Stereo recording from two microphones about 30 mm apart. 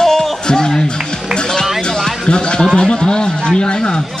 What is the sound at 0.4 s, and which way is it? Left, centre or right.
Music, left.